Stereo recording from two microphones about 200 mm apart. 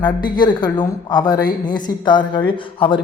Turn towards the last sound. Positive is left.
turn(degrees=25)  # may be behind; listen again after turning